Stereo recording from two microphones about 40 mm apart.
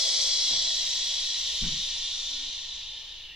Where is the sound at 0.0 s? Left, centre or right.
Centre.